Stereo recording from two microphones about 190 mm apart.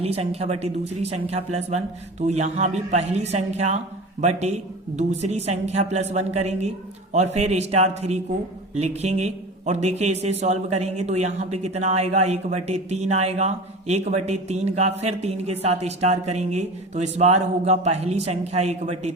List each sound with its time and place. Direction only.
0.0 s speech: 30° right (ahead or behind)